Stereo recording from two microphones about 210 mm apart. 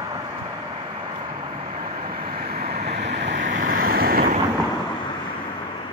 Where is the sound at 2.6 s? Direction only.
30° right (ahead or behind).